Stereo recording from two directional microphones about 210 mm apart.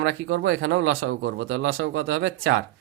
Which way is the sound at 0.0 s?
65° right (ahead or behind).